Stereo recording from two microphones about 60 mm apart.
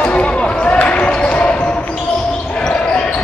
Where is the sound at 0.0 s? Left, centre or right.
Centre.